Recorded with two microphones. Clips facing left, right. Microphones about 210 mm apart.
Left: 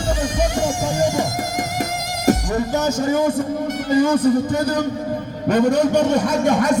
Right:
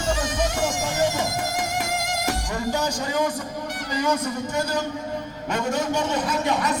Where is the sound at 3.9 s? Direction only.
50° left (ahead or behind).